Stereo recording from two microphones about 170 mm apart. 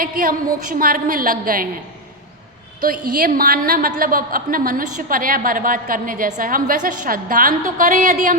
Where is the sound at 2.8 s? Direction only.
55° right (ahead or behind).